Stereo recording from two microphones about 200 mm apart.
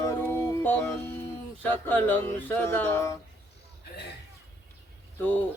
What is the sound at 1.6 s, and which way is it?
Speech, 10° left (ahead or behind).